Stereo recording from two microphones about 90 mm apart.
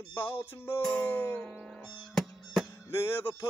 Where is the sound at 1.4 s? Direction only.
10° left (ahead or behind).